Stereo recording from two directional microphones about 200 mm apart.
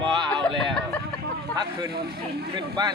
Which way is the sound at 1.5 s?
20° right (ahead or behind).